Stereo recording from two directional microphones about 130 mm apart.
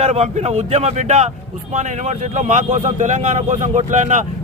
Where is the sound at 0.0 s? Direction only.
55° right (ahead or behind).